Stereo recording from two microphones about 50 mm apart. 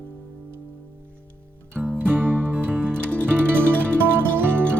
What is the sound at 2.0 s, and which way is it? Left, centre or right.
Music, right.